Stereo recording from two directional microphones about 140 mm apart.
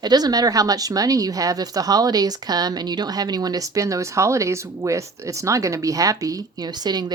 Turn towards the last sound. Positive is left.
turn(degrees=-30)  # may be behind; listen again after turning